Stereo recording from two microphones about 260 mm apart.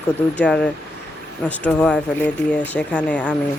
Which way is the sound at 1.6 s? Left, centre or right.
Centre.